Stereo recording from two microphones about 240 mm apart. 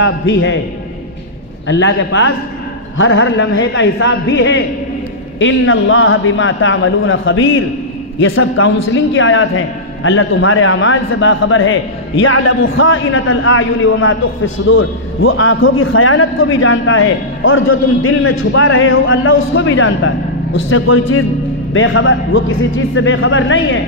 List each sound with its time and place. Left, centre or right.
0.0 s a man's voice: left
1.7 s a man's voice: left